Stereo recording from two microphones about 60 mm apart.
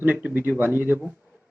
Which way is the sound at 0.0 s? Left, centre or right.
Right.